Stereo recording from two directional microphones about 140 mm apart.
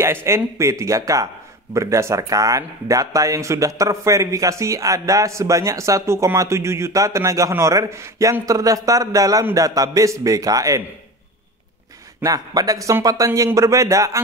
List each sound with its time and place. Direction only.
0.0 s speech: 20° right (ahead or behind)
12.2 s speech: 25° right (ahead or behind)